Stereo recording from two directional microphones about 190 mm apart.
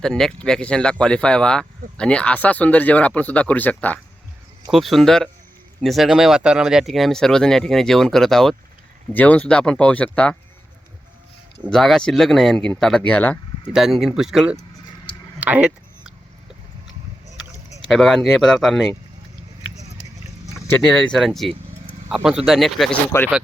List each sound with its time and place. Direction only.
0.0 s speech: 5° left (ahead or behind)
11.6 s speech: centre (ahead or behind)
13.7 s speech: centre (ahead or behind)
15.4 s a sound: 5° right (ahead or behind)
17.9 s speech: centre (ahead or behind)
20.7 s speech: centre (ahead or behind)